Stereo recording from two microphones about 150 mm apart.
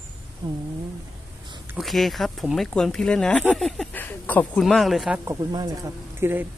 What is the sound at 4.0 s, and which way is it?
Speech, 15° left (ahead or behind).